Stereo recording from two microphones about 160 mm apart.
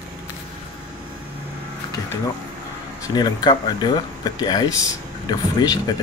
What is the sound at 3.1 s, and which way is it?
Speech, 25° left (ahead or behind).